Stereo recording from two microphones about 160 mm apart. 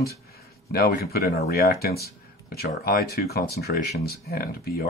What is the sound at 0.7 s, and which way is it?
Speech, 70° left (ahead or behind).